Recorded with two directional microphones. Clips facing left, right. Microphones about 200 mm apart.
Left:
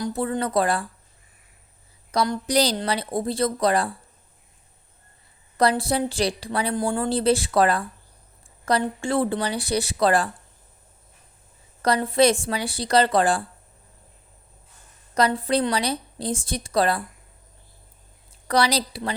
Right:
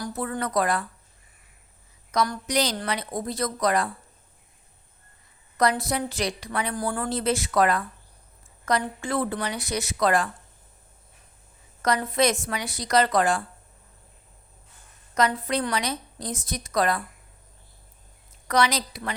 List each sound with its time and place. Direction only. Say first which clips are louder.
0.0 s a woman's voice: left 4 dB; 25° left (ahead or behind)
2.1 s a woman's voice: left 3 dB; 25° left (ahead or behind)
5.5 s a woman's voice: left 3 dB; 30° left (ahead or behind)
11.8 s a woman's voice: left 4 dB; 30° left (ahead or behind)
15.1 s a woman's voice: left 3 dB; 35° left (ahead or behind)
18.4 s a woman's voice: left 2 dB; 35° left (ahead or behind)